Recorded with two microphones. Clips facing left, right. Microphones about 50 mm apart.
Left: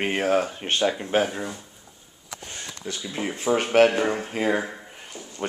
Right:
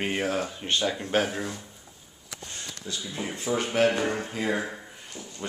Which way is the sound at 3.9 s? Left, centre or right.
Centre.